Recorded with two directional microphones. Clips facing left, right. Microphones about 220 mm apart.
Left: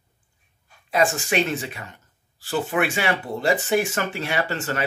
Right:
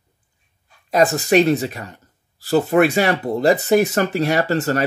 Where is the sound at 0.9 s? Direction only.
40° right (ahead or behind).